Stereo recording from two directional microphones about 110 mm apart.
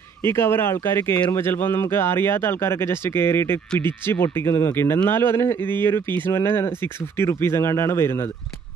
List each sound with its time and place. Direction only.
0.2 s speech: 20° left (ahead or behind)